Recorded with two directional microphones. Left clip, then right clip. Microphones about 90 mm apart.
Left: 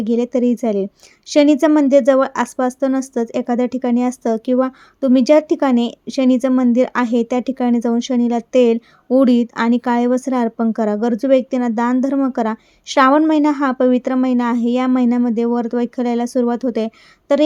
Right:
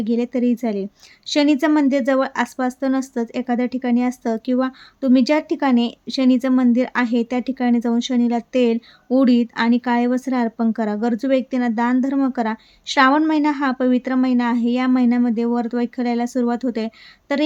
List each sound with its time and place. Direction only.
0.0 s speech: 40° left (ahead or behind)